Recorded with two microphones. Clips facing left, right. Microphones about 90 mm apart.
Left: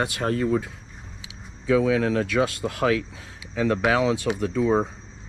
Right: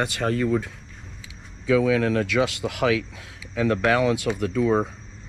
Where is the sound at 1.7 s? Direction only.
25° left (ahead or behind).